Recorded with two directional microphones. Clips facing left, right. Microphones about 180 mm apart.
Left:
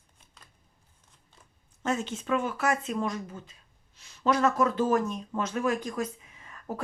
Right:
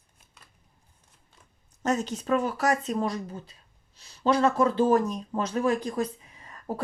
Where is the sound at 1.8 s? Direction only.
40° right (ahead or behind).